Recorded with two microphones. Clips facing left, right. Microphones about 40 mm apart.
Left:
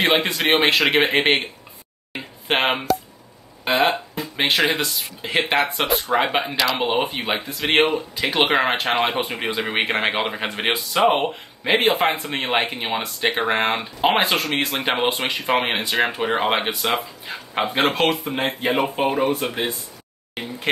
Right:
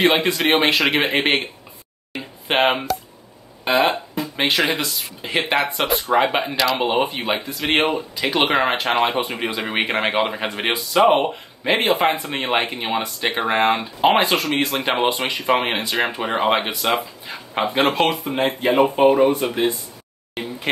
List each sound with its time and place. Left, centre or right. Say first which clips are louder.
0.2 s speech: right 1 dB; centre